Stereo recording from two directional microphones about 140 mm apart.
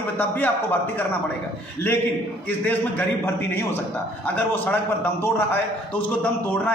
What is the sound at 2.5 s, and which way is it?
A man's voice, 10° left (ahead or behind).